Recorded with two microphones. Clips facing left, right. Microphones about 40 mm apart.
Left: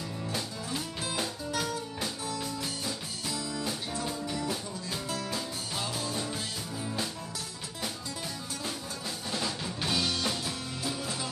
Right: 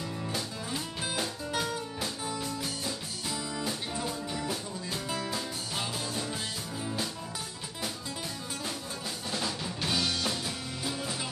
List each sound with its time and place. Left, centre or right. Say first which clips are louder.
1.5 s music: right 1 dB; centre
2.4 s music: even; centre
3.3 s music: even; centre
9.3 s music: even; centre